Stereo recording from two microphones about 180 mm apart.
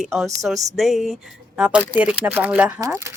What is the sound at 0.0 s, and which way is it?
Speech, centre (ahead or behind).